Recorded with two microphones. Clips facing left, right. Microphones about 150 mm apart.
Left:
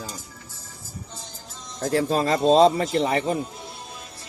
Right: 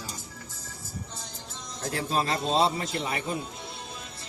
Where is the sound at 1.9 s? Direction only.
40° left (ahead or behind).